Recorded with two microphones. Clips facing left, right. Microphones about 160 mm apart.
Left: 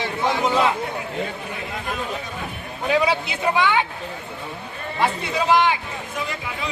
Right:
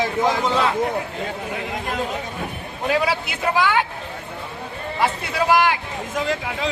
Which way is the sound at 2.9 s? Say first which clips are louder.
Left 1 dB; 5° right (ahead or behind).